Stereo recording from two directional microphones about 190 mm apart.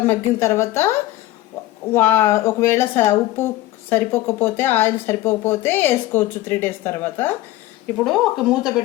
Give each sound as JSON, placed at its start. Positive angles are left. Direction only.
{"t": 0.1, "sound": "speech", "side_deg": 15}
{"t": 1.9, "sound": "speech", "side_deg": 10}
{"t": 8.0, "sound": "speech", "side_deg": 0}